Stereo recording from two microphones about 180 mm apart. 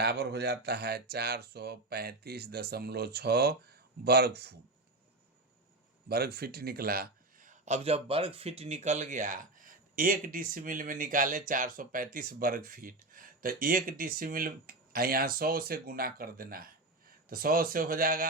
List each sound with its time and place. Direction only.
0.0 s speech: 65° right (ahead or behind)
6.1 s a man's voice: 60° right (ahead or behind)